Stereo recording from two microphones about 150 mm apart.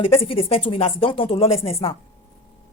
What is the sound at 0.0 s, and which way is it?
Speech, 40° left (ahead or behind).